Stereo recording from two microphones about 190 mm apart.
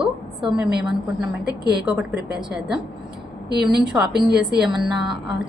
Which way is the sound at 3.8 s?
5° right (ahead or behind).